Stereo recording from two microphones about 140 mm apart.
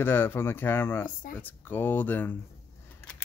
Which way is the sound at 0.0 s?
15° left (ahead or behind).